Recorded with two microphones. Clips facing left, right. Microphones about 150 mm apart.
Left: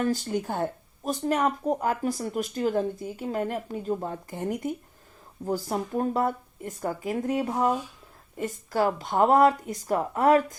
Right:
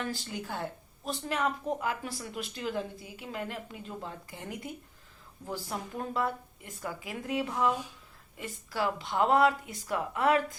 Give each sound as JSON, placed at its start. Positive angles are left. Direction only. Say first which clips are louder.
{"t": 0.0, "sound": "speech", "louder": "left 10 dB", "side_deg": 45}